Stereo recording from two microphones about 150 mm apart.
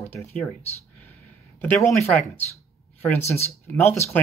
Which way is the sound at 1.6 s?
10° left (ahead or behind).